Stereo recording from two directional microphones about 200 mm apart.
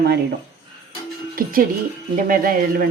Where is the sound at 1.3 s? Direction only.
45° right (ahead or behind).